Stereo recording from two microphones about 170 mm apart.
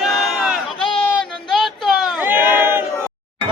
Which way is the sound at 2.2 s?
10° right (ahead or behind).